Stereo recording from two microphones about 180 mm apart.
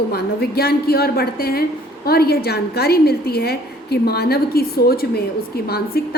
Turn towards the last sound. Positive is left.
turn(degrees=60)  # may be behind; listen again after turning